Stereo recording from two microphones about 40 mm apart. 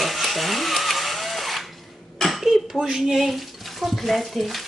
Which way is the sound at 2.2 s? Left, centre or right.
Centre.